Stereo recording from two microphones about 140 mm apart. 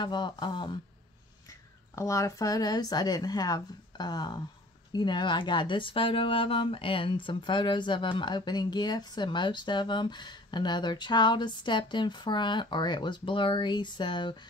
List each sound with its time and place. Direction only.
0.0 s speech: 35° left (ahead or behind)
1.5 s speech: 20° left (ahead or behind)